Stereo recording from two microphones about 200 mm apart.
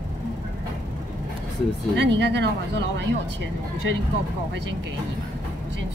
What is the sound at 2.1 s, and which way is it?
Speech, 60° right (ahead or behind).